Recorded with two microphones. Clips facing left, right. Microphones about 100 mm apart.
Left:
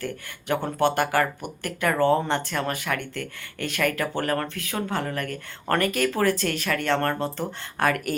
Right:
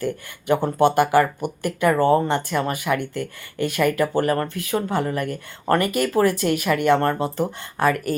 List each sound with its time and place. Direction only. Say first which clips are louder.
0.0 s speech: right 6 dB; 10° right (ahead or behind)